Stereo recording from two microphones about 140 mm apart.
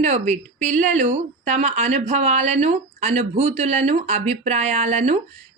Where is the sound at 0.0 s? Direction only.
55° right (ahead or behind).